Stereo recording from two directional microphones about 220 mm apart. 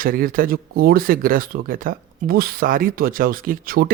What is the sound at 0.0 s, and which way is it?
Speech, 40° right (ahead or behind).